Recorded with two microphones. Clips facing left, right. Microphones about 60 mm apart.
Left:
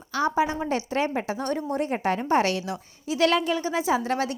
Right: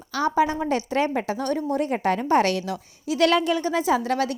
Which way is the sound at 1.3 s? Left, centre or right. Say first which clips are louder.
Right 3 dB; centre.